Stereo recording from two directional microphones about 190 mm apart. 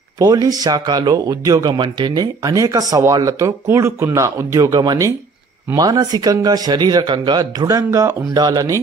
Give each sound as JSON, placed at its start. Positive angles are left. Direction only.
{"t": 0.2, "sound": "speech", "side_deg": -20}